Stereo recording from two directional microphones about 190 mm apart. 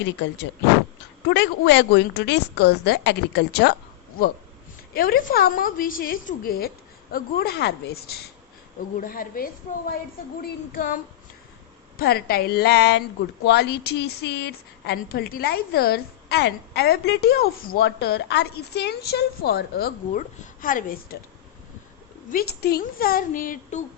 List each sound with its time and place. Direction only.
0.0 s a woman's voice: 70° left (ahead or behind)
4.9 s a woman's voice: 50° left (ahead or behind)
22.3 s a woman's voice: 55° left (ahead or behind)